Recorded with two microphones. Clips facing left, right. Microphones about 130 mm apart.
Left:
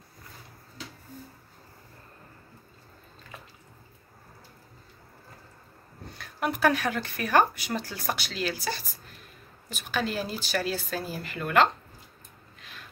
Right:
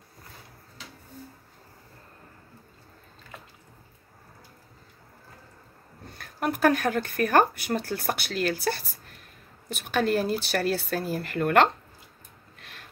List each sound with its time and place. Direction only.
6.1 s speech: 45° right (ahead or behind)
12.5 s gasp: 65° right (ahead or behind)